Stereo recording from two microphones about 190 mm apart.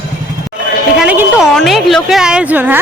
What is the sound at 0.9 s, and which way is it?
A woman's voice, 5° right (ahead or behind).